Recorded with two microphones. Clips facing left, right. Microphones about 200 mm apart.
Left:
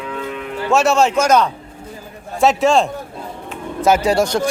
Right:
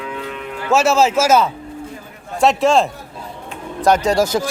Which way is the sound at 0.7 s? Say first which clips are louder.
Even; centre (ahead or behind).